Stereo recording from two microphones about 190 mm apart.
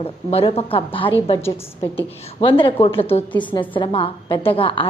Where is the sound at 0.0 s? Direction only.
30° left (ahead or behind).